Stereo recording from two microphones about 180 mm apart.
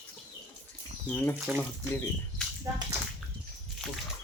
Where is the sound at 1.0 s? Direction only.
10° left (ahead or behind).